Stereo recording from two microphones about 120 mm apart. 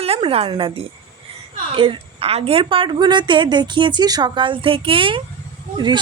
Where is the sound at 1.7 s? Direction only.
50° right (ahead or behind).